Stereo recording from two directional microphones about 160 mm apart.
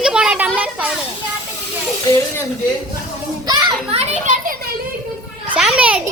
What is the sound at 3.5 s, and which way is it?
Children playing, 30° right (ahead or behind).